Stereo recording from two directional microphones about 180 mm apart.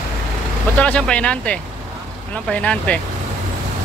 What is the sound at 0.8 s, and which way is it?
Speech, 5° left (ahead or behind).